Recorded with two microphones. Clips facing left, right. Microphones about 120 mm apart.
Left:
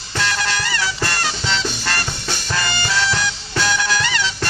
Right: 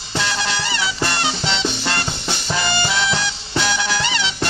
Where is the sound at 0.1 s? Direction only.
20° right (ahead or behind).